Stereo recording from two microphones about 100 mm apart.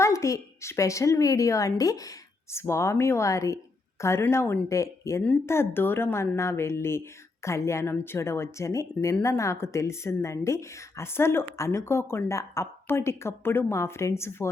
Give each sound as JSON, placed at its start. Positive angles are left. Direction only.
{"t": 0.0, "sound": "a woman's voice", "side_deg": 30}